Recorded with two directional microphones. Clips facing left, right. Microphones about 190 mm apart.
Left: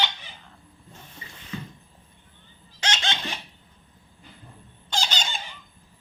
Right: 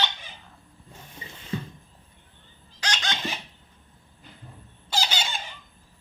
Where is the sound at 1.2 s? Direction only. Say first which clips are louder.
Right 3 dB; 25° right (ahead or behind).